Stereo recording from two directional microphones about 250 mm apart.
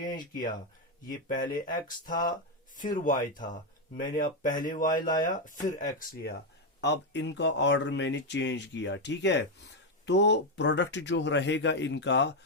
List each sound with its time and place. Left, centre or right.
0.0 s speech: left
1.5 s speech: left
6.8 s speech: left